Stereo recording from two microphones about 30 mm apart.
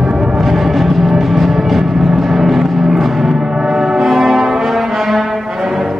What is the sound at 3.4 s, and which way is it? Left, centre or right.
Foghorn, right.